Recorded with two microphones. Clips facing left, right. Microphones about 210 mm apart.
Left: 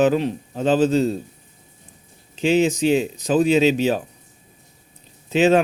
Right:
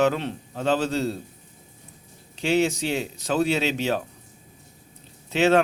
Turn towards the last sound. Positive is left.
turn(degrees=15)  # may be behind; listen again after turning